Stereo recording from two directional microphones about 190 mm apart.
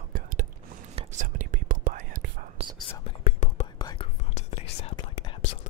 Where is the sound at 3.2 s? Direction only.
35° left (ahead or behind).